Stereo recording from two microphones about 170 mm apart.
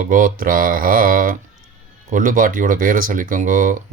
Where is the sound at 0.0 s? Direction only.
55° right (ahead or behind).